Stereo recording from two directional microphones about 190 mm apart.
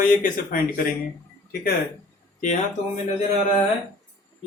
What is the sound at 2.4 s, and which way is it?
Speech, 40° left (ahead or behind).